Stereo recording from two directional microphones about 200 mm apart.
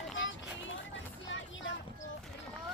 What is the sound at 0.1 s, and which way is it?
Music, 70° left (ahead or behind).